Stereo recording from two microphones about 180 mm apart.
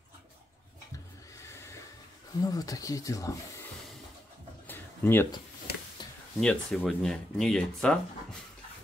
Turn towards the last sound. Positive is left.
turn(degrees=5)  # may be behind; listen again after turning